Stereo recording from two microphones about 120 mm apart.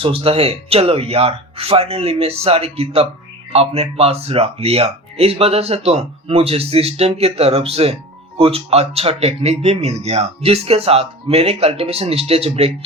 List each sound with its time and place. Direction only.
0.0 s speech: 50° right (ahead or behind)